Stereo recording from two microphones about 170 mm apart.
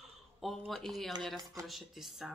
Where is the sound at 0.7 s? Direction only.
Centre (ahead or behind).